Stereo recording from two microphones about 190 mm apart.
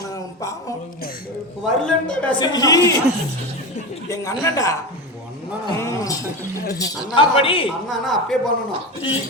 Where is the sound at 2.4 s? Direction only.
20° left (ahead or behind).